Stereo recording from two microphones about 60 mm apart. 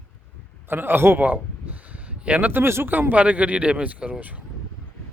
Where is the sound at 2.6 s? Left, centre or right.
Right.